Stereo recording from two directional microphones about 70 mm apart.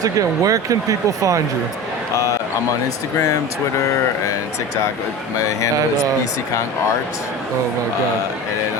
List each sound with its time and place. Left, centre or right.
0.0 s speech: right